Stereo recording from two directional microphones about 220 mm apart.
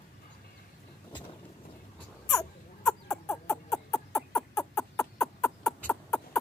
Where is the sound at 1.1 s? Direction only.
20° left (ahead or behind).